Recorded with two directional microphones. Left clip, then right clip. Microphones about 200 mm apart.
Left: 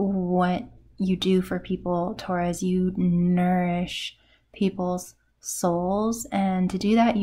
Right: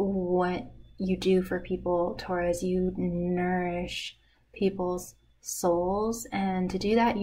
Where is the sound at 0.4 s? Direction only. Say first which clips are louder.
Left 4 dB; 45° left (ahead or behind).